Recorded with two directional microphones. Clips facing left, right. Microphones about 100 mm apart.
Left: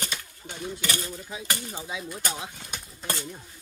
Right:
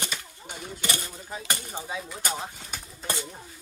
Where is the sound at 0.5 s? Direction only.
20° right (ahead or behind).